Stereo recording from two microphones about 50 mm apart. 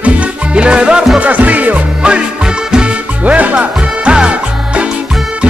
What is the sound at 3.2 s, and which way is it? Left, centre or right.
Music, right.